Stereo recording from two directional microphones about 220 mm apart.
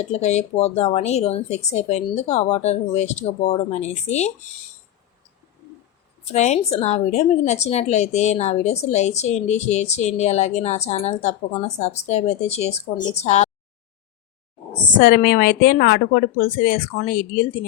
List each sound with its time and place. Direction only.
0.0 s speech: 30° left (ahead or behind)
6.3 s a woman's voice: 30° left (ahead or behind)
14.9 s a woman's voice: 45° left (ahead or behind)